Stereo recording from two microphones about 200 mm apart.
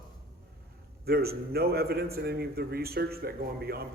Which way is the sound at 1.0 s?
50° right (ahead or behind).